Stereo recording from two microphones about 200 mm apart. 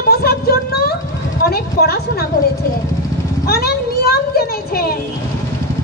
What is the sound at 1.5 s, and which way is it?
Speech, 50° left (ahead or behind).